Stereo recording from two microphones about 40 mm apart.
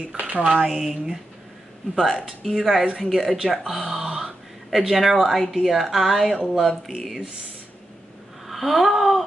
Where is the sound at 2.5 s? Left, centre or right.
Centre.